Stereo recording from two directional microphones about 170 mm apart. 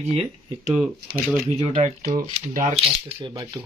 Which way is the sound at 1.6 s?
40° right (ahead or behind).